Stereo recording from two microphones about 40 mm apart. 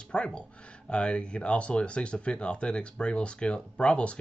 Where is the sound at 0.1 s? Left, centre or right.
Left.